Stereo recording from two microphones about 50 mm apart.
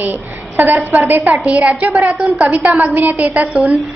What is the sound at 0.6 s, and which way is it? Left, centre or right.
Speech, right.